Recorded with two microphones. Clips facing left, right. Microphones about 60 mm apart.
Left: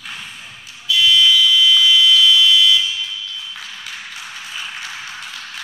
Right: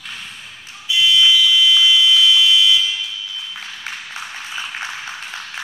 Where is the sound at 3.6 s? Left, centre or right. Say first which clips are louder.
Right 1 dB; right.